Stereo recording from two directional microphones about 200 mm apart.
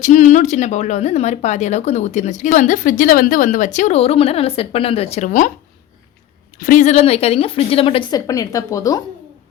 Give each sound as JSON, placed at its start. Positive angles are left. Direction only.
{"t": 0.0, "sound": "speech", "side_deg": 35}
{"t": 6.6, "sound": "a woman's voice", "side_deg": 40}